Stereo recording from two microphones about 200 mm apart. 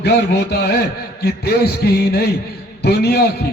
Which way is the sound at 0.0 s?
55° left (ahead or behind).